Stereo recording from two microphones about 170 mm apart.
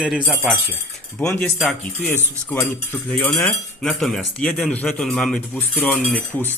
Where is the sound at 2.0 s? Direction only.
10° left (ahead or behind).